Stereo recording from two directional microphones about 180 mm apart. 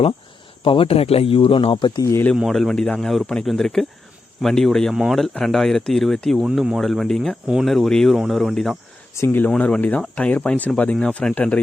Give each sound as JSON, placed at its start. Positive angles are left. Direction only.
{"t": 0.6, "sound": "speech", "side_deg": 30}
{"t": 2.3, "sound": "speech", "side_deg": 0}
{"t": 9.1, "sound": "speech", "side_deg": 10}